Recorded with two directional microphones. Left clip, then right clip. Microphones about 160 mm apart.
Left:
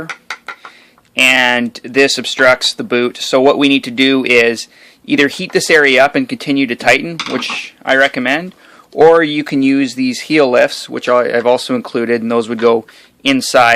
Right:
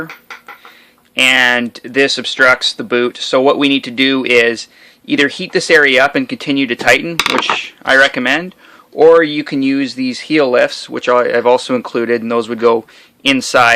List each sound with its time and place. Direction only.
1.1 s speech: 30° left (ahead or behind)